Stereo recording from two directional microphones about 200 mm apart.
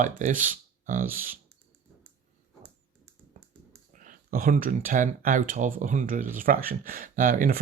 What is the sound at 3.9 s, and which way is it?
Speech, 45° right (ahead or behind).